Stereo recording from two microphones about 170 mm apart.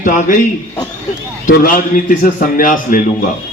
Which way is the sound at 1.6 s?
55° left (ahead or behind).